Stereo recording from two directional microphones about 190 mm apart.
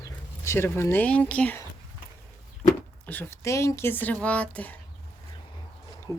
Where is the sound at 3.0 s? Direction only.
10° left (ahead or behind).